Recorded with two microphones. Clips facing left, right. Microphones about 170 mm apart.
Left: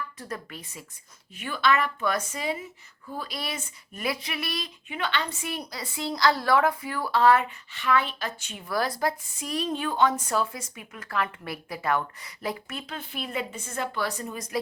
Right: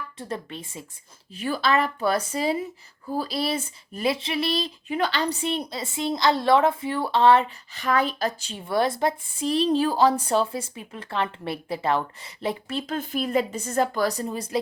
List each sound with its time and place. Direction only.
0.2 s a woman's voice: 25° right (ahead or behind)
12.8 s a woman's voice: 45° right (ahead or behind); by 14.6 s 30° right (ahead or behind)